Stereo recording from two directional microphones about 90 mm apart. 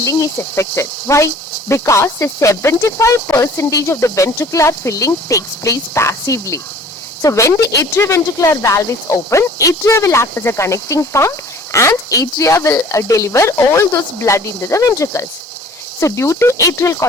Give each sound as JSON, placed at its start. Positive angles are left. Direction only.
{"t": 0.0, "sound": "speech", "side_deg": 35}